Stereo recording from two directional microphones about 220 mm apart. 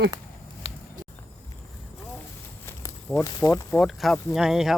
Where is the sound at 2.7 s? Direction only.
10° left (ahead or behind).